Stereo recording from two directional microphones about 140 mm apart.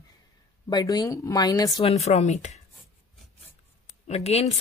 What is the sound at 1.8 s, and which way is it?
Speech, 50° left (ahead or behind).